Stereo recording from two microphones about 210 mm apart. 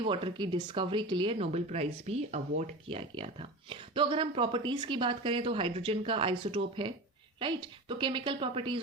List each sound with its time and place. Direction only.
0.0 s speech: 25° right (ahead or behind)